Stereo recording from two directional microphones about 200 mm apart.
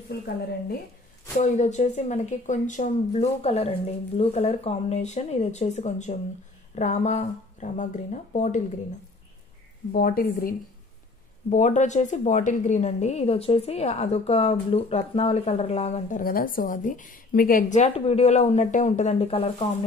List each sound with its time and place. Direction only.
0.1 s a woman's voice: 50° left (ahead or behind)
1.4 s a woman's voice: 35° left (ahead or behind)
9.9 s a woman's voice: 45° left (ahead or behind)
11.5 s a woman's voice: 35° left (ahead or behind)